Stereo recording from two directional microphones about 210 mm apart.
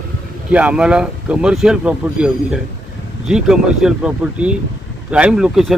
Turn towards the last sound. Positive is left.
turn(degrees=0)  # may be behind; listen again after turning